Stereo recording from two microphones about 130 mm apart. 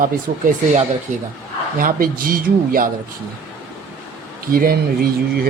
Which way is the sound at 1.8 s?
90° right.